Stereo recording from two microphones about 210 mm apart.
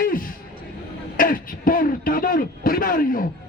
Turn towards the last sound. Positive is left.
turn(degrees=40)  # may be behind; listen again after turning